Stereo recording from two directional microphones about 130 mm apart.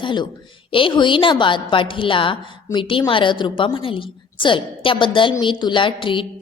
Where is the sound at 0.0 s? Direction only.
35° left (ahead or behind).